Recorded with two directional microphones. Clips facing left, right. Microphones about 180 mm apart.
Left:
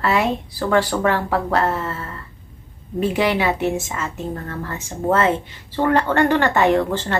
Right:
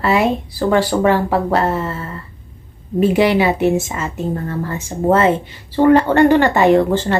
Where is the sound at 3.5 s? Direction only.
15° right (ahead or behind).